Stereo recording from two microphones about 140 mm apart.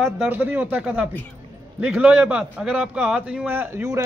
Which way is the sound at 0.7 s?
Centre (ahead or behind).